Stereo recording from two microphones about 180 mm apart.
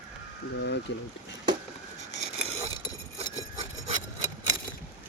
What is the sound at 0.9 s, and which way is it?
Speech, 75° left (ahead or behind).